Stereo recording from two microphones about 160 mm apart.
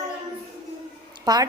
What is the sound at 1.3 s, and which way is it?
Speech, 25° right (ahead or behind).